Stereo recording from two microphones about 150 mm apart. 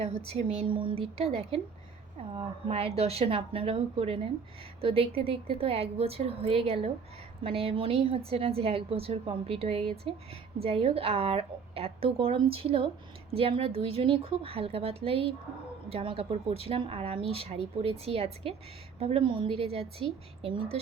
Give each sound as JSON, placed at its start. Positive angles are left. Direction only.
{"t": 0.0, "sound": "speech", "side_deg": -45}